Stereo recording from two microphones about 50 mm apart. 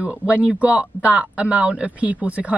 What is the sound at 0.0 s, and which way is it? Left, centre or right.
Speech, right.